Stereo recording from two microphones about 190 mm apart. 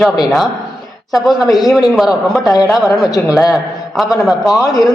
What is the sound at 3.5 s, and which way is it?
A man's voice, centre (ahead or behind).